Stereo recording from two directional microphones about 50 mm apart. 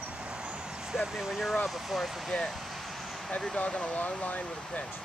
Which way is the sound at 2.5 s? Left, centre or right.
Centre.